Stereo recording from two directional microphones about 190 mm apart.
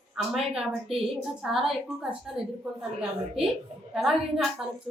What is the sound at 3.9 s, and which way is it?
Speech, centre (ahead or behind).